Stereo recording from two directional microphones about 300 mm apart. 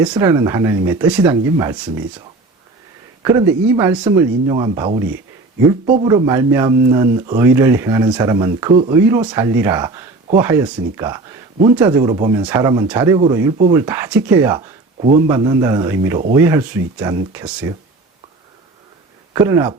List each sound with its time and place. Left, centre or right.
0.0 s speech: centre
3.2 s speech: centre
19.3 s speech: centre